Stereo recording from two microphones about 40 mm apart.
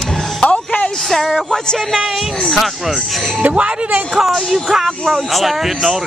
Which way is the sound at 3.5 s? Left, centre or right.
Right.